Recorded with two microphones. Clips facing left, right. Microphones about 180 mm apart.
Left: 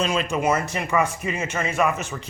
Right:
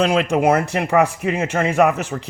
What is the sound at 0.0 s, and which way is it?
Speech, 70° right (ahead or behind).